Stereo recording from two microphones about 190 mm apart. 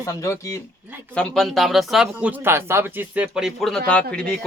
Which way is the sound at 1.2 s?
Centre (ahead or behind).